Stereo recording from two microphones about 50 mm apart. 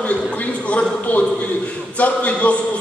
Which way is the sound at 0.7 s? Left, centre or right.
Left.